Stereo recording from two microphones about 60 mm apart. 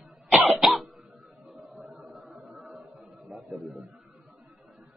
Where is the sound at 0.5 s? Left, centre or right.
Centre.